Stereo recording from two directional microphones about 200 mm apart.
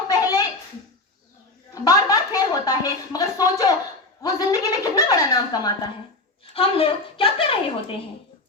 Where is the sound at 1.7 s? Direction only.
15° left (ahead or behind).